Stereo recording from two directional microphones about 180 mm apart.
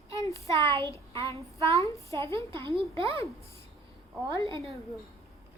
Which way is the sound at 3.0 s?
30° right (ahead or behind).